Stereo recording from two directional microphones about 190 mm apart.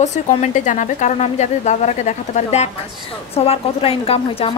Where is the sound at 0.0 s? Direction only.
40° left (ahead or behind).